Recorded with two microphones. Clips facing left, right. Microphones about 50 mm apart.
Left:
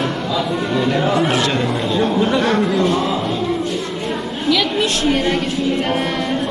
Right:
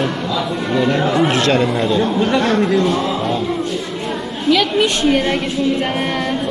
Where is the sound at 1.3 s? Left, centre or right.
Right.